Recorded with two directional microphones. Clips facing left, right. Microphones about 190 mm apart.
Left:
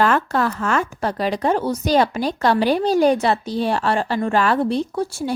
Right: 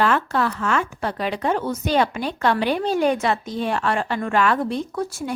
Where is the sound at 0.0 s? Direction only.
45° left (ahead or behind).